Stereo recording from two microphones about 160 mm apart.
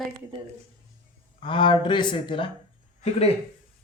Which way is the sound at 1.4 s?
30° left (ahead or behind).